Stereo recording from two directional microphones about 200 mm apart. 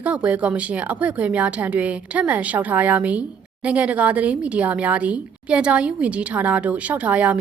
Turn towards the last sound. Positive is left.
turn(degrees=-5)  # may be behind; listen again after turning